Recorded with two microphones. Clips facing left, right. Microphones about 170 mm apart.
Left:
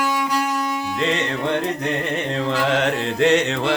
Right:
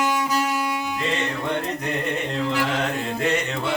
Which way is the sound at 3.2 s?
80° left.